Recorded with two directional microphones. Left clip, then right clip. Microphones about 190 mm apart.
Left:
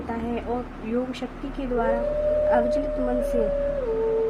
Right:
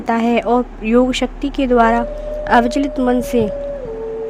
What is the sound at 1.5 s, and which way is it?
A woman's voice, 60° right (ahead or behind).